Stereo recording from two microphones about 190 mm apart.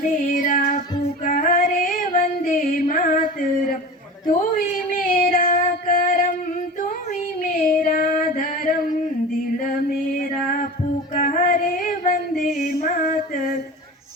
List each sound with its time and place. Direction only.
0.0 s child singing: 45° left (ahead or behind)
1.2 s female singing: 45° left (ahead or behind)
4.9 s a sound: 50° left (ahead or behind)
7.4 s female singing: 45° left (ahead or behind)
11.1 s female singing: 45° left (ahead or behind)
12.5 s music: 50° left (ahead or behind)